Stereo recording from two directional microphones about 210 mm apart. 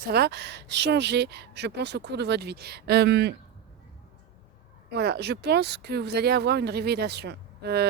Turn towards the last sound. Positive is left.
turn(degrees=-50)  # may be behind; listen again after turning